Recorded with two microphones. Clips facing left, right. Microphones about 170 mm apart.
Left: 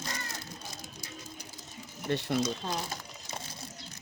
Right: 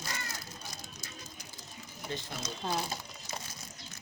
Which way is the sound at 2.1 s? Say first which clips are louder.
Left 9 dB; 65° left (ahead or behind).